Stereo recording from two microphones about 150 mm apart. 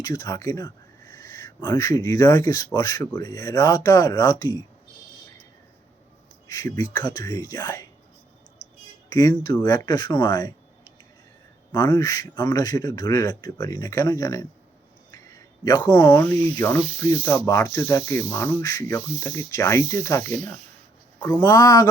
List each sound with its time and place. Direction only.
0.0 s speech: 25° left (ahead or behind)
6.5 s speech: 25° left (ahead or behind)
9.1 s speech: 25° left (ahead or behind)
11.7 s speech: 25° left (ahead or behind)
15.1 s a sound: 25° left (ahead or behind)
16.6 s speech: 20° left (ahead or behind)